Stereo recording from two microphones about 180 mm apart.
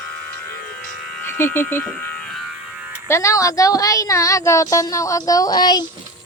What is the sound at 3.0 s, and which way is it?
A woman's voice, 15° left (ahead or behind).